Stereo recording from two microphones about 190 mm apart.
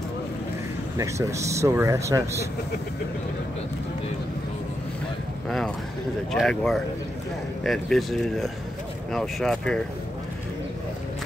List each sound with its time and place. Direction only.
0.9 s speech: 15° right (ahead or behind)
6.3 s speech: centre (ahead or behind)